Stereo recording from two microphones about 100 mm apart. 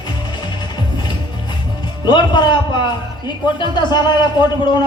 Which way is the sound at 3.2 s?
50° left (ahead or behind).